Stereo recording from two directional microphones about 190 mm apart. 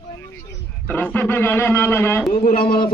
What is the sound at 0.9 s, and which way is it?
A man's voice, 10° left (ahead or behind).